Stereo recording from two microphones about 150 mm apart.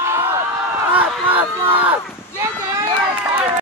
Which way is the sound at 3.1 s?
5° right (ahead or behind).